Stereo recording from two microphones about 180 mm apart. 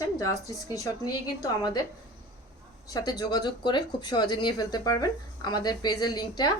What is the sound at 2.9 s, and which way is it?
A woman's voice, 20° left (ahead or behind).